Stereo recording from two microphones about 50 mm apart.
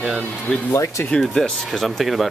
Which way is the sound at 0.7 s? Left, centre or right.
Left.